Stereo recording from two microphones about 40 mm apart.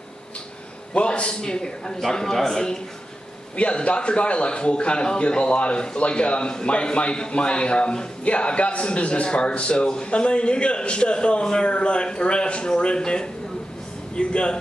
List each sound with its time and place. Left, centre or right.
0.9 s a man's voice: left
3.5 s speech: left